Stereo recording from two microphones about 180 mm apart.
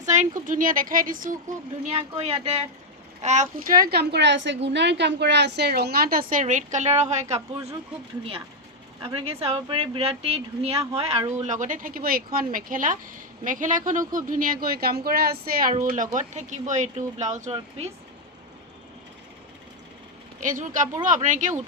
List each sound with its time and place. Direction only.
0.0 s a sound: 40° right (ahead or behind)
0.4 s speech: 50° right (ahead or behind)
1.9 s a woman's voice: 35° right (ahead or behind)
9.0 s a woman's voice: 30° right (ahead or behind)
20.4 s speech: 45° right (ahead or behind)